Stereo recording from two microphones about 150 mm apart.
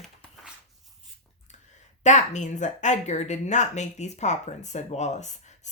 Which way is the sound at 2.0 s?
50° left (ahead or behind).